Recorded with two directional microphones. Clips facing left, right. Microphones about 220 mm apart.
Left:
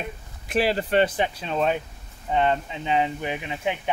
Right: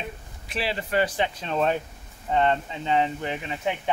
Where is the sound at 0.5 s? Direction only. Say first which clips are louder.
Left 7 dB; 45° left (ahead or behind).